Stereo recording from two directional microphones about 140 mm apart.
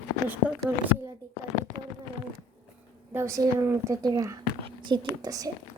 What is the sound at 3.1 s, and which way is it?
Speech, 20° right (ahead or behind).